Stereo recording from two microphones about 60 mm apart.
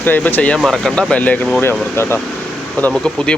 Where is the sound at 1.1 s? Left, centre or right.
Left.